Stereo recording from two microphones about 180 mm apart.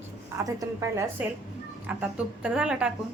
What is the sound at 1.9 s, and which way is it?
A woman's voice, 5° right (ahead or behind).